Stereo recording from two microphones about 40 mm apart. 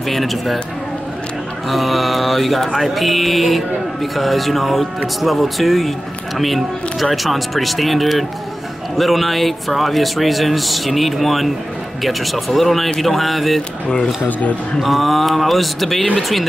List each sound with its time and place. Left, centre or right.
0.1 s mantra: centre
1.7 s mantra: centre
13.8 s speech: left
14.8 s mantra: centre